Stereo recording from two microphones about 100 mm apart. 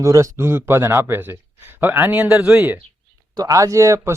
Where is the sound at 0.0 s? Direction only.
30° right (ahead or behind); by 2.8 s 15° right (ahead or behind).